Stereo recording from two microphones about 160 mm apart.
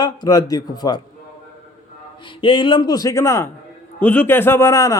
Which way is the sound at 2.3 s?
30° left (ahead or behind).